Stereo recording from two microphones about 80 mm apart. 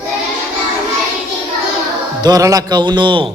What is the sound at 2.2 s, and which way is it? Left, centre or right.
A man's voice, right.